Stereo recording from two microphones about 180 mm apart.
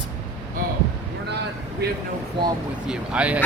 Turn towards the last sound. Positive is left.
turn(degrees=-5)  # may be behind; listen again after turning